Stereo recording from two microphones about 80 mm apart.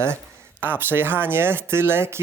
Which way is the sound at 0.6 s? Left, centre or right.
Right.